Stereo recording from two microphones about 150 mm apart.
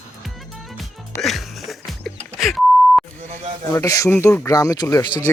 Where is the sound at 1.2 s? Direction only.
Centre (ahead or behind).